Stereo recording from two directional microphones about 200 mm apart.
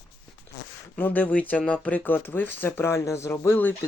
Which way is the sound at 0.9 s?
10° left (ahead or behind).